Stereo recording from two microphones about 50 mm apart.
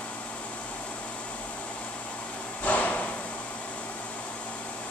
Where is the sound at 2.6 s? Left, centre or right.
Left.